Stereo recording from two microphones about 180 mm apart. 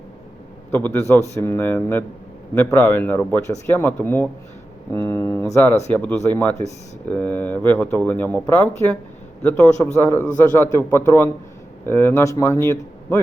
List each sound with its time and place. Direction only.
0.7 s a man's voice: 10° left (ahead or behind)